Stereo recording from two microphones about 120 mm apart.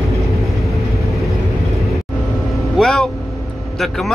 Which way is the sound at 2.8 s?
5° left (ahead or behind).